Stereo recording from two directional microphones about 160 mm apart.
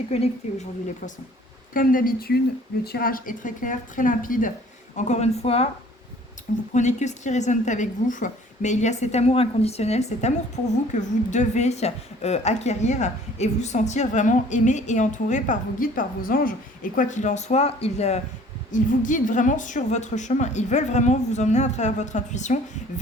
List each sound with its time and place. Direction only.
0.1 s a woman's voice: 40° left (ahead or behind)
1.7 s speech: 60° left (ahead or behind)
4.9 s a woman's voice: 45° left (ahead or behind)
6.7 s a woman's voice: 45° left (ahead or behind)
18.7 s a woman's voice: 55° left (ahead or behind)